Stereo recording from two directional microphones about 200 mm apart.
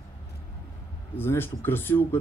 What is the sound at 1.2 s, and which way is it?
Speech, 10° left (ahead or behind).